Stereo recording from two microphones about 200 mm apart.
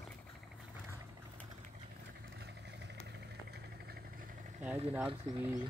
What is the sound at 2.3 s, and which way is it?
Vehicle, 55° right (ahead or behind).